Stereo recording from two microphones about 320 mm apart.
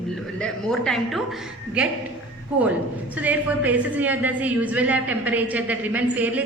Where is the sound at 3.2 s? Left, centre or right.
Centre.